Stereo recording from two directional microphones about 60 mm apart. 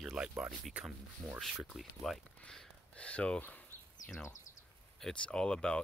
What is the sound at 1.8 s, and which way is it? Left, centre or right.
Speech, centre.